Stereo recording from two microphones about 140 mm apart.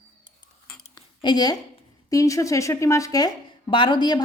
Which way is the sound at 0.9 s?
30° left (ahead or behind).